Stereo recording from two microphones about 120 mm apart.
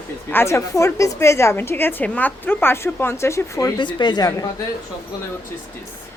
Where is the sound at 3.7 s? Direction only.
40° left (ahead or behind).